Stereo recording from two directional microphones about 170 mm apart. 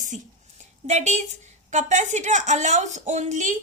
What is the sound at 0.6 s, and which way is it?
A woman's voice, 45° right (ahead or behind).